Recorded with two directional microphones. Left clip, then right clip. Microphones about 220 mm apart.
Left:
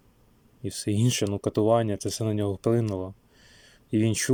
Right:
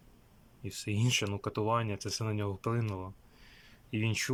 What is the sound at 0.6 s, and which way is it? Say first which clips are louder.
Speech: left 9 dB; 25° left (ahead or behind).